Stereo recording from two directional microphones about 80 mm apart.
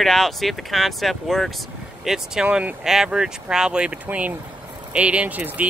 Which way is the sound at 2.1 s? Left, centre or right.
Centre.